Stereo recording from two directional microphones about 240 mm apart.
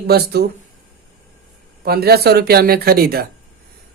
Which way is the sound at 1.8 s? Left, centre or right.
Right.